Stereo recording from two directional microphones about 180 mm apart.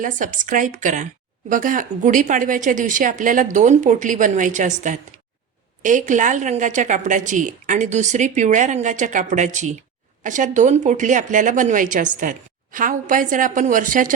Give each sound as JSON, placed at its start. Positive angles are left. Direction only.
{"t": 0.0, "sound": "a woman's voice", "side_deg": -45}